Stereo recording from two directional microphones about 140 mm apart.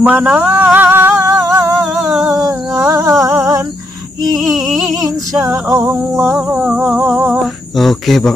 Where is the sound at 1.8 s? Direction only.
Centre (ahead or behind).